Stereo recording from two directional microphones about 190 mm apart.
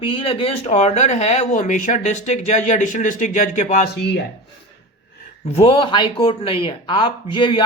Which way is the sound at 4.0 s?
60° left (ahead or behind).